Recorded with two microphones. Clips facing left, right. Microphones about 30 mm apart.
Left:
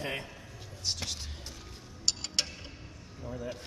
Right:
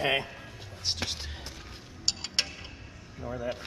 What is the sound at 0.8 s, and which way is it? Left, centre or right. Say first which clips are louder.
Whispering: right 3 dB; right.